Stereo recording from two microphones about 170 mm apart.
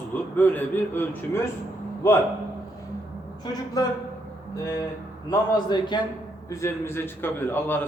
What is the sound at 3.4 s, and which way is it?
Speech, 20° left (ahead or behind).